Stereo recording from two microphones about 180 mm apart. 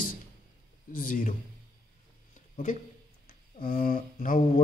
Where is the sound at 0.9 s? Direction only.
45° left (ahead or behind).